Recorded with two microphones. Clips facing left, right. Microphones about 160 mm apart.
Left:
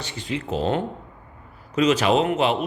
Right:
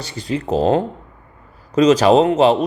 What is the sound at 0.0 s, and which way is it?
A man's voice, 40° right (ahead or behind).